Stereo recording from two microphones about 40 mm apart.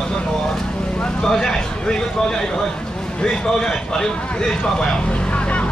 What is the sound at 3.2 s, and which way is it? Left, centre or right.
A man's voice, centre.